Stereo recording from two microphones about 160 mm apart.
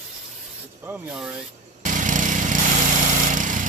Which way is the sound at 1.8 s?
55° right (ahead or behind).